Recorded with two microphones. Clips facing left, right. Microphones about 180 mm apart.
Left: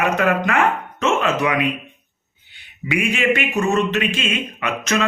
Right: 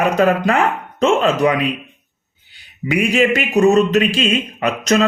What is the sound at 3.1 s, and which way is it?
A man's voice, 40° right (ahead or behind).